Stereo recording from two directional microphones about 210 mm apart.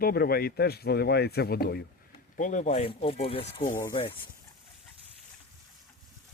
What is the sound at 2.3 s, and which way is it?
Speech, 35° left (ahead or behind).